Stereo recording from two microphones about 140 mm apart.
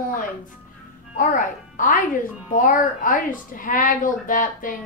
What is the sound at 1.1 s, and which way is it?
A child's voice, 70° left (ahead or behind).